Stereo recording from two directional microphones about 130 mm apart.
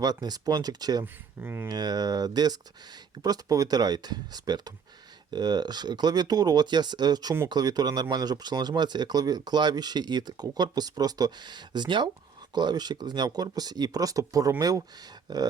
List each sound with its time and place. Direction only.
0.0 s speech: 30° right (ahead or behind)
1.0 s speech: 15° right (ahead or behind)
1.6 s speech: 30° right (ahead or behind)